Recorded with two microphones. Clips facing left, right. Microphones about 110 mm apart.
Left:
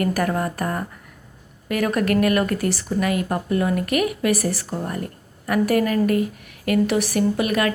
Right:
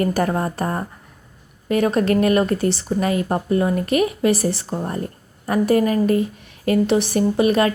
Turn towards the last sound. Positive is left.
turn(degrees=-30)  # may be behind; listen again after turning